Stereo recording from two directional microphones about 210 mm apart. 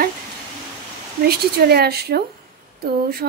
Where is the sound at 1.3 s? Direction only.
50° right (ahead or behind).